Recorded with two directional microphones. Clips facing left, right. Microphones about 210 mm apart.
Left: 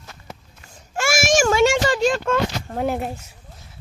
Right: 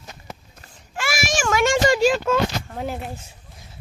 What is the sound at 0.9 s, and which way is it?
Child singing, 45° left (ahead or behind).